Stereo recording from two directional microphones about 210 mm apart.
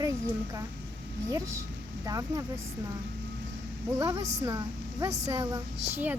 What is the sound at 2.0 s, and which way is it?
Speech, 15° right (ahead or behind).